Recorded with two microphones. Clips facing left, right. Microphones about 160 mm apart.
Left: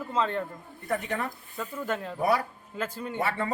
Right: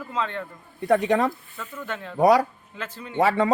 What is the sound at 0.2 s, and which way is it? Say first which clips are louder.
Speech: left 1 dB; 35° left (ahead or behind).